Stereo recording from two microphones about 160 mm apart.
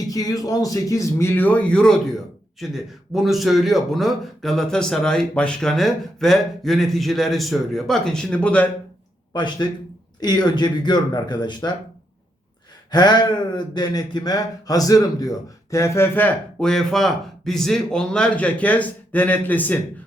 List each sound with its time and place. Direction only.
0.1 s a man's voice: 20° left (ahead or behind)
9.3 s speech: 25° left (ahead or behind)
12.9 s speech: 25° left (ahead or behind); by 19.8 s 10° left (ahead or behind)